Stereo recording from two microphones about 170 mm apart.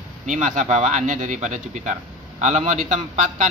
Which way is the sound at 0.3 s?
45° right (ahead or behind).